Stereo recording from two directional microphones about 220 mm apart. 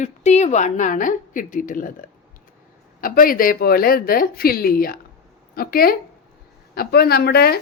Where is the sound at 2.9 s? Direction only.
40° left (ahead or behind).